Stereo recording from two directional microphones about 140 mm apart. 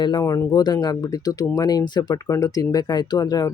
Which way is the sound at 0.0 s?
30° left (ahead or behind).